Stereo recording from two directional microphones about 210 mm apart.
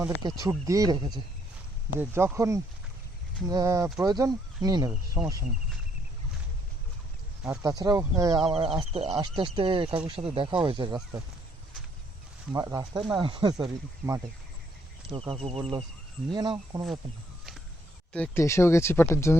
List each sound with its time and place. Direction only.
0.0 s speech: 20° right (ahead or behind)
7.5 s speech: 15° right (ahead or behind)
12.5 s speech: 15° right (ahead or behind)
15.3 s speech: 25° right (ahead or behind)
18.1 s speech: 10° left (ahead or behind)